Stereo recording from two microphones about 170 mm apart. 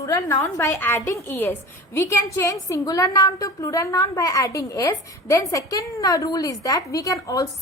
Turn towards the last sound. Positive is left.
turn(degrees=20)  # may be behind; listen again after turning